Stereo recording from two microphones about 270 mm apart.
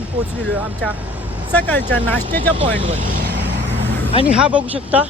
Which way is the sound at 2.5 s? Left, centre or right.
Centre.